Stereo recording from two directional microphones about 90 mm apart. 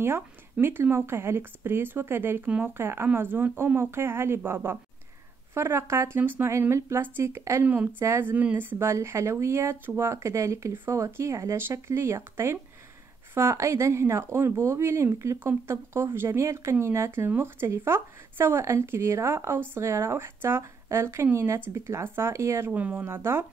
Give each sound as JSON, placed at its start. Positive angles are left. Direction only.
{"t": 0.0, "sound": "speech", "side_deg": -25}
{"t": 7.6, "sound": "a woman's voice", "side_deg": -15}
{"t": 8.0, "sound": "speech", "side_deg": -30}
{"t": 22.8, "sound": "a woman's voice", "side_deg": -15}
{"t": 23.0, "sound": "speech", "side_deg": -25}